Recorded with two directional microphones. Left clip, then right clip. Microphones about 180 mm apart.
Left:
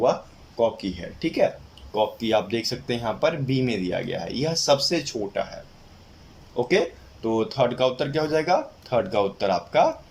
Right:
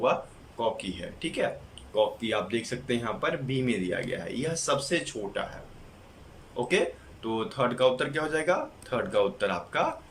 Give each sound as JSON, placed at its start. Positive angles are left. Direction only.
{"t": 0.6, "sound": "speech", "side_deg": 35}
{"t": 6.7, "sound": "speech", "side_deg": 35}